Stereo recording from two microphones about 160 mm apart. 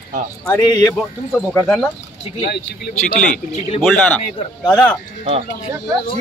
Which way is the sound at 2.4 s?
75° left (ahead or behind).